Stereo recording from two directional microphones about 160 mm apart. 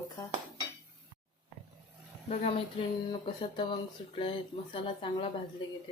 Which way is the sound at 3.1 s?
30° left (ahead or behind).